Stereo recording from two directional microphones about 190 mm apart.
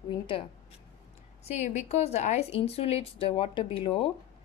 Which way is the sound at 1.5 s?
35° left (ahead or behind).